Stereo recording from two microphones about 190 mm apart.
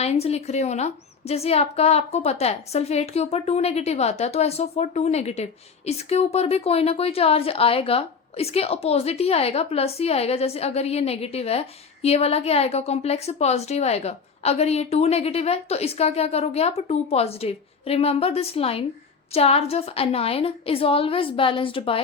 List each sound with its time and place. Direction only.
0.0 s a woman's voice: 35° left (ahead or behind)